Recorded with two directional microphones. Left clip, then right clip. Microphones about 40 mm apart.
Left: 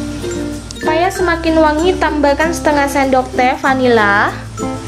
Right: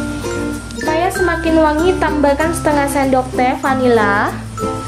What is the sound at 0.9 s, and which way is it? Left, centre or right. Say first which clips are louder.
A woman's voice: left 1 dB; centre.